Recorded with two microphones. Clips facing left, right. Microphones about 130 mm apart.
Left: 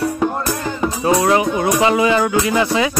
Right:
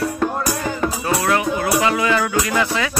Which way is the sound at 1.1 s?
25° left (ahead or behind).